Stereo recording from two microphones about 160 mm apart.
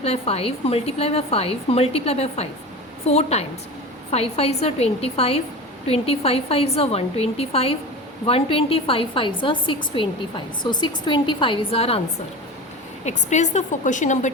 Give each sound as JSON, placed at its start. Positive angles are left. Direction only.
{"t": 0.0, "sound": "a woman's voice", "side_deg": 40}
{"t": 13.1, "sound": "a woman's voice", "side_deg": 45}